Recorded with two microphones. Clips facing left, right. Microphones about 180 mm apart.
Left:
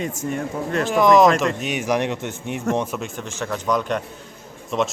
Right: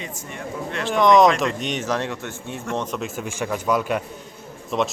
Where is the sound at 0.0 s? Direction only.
45° left (ahead or behind).